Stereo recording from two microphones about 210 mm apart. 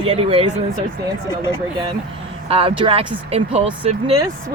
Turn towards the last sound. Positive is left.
turn(degrees=-25)  # may be behind; listen again after turning